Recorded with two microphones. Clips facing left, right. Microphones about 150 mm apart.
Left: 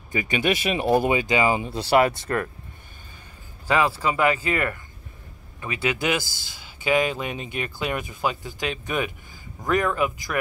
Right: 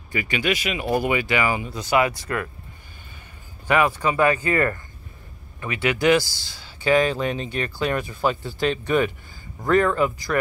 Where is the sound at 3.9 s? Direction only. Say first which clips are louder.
Right 2 dB; 15° left (ahead or behind).